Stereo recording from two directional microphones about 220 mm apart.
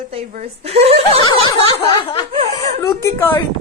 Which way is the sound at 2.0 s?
20° left (ahead or behind).